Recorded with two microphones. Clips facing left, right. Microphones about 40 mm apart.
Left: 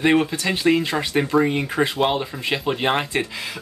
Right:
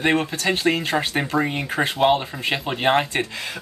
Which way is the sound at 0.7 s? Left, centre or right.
Centre.